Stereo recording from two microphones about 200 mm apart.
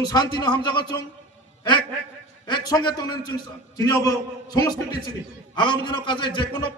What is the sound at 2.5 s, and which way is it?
A man's voice, 20° left (ahead or behind).